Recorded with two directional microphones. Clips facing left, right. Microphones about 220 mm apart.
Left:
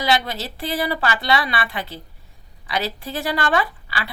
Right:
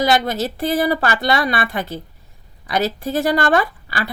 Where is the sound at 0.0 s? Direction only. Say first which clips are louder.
Right 5 dB; 45° right (ahead or behind).